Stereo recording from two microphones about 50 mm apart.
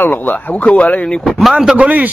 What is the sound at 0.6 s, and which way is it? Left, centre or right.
Speech, left.